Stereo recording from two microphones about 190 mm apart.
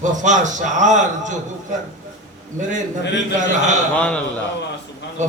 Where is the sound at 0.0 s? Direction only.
40° right (ahead or behind).